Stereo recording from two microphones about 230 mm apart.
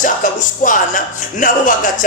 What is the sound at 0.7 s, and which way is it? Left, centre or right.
Speech, left.